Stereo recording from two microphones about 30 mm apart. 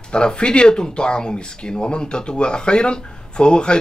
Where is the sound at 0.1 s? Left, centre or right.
Left.